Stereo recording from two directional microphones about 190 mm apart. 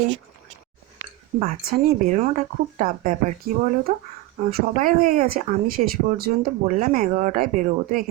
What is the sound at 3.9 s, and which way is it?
Speech, 40° right (ahead or behind).